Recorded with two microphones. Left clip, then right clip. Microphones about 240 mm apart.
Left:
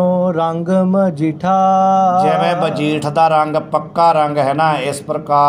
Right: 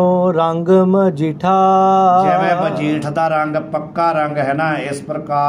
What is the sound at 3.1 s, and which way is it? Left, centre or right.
A man's voice, left.